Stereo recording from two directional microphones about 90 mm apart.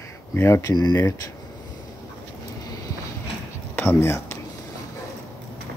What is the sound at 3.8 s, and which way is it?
Speech, 30° left (ahead or behind).